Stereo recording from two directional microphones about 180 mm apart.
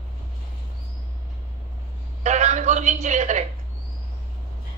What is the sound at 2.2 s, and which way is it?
A man's voice, 40° right (ahead or behind).